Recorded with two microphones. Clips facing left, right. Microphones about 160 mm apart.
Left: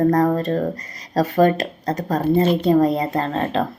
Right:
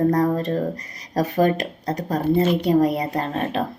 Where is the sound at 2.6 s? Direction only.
15° right (ahead or behind).